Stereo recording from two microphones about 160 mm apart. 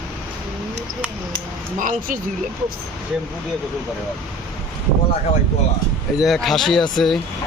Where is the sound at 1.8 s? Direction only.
55° right (ahead or behind).